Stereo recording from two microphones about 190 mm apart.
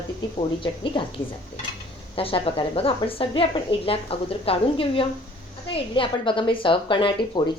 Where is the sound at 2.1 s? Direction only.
30° left (ahead or behind).